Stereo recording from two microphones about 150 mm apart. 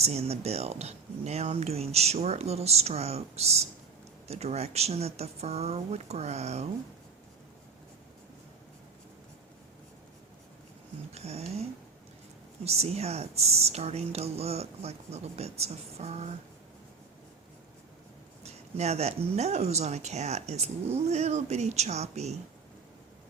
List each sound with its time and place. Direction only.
0.0 s speech: 45° right (ahead or behind)
11.1 s speech: 45° right (ahead or behind)
12.6 s speech: 45° right (ahead or behind)
18.4 s speech: 45° right (ahead or behind)